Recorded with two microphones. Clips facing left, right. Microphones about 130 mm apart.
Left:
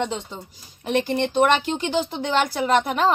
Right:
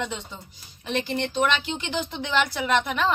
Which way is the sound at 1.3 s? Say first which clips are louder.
Left 6 dB; 50° left (ahead or behind).